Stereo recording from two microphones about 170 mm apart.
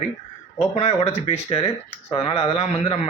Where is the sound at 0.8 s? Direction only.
40° left (ahead or behind).